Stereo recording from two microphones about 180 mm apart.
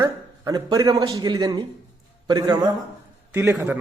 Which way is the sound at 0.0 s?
20° right (ahead or behind).